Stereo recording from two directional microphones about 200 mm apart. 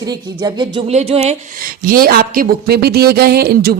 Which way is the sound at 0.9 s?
30° right (ahead or behind).